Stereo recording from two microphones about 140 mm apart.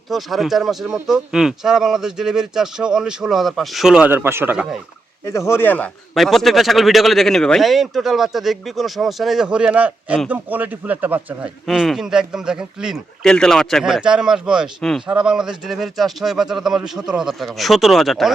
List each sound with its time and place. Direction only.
0.1 s speech: centre (ahead or behind); by 4.5 s 15° right (ahead or behind)
4.5 s speech: centre (ahead or behind)
5.2 s speech: 20° left (ahead or behind)
6.1 s speech: centre (ahead or behind)
11.6 s speech: centre (ahead or behind)